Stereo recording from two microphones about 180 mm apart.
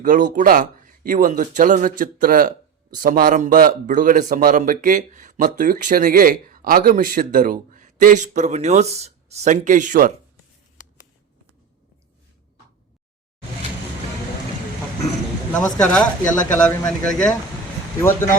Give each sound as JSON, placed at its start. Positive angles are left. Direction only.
{"t": 0.0, "sound": "speech", "side_deg": -45}
{"t": 15.8, "sound": "speech", "side_deg": 5}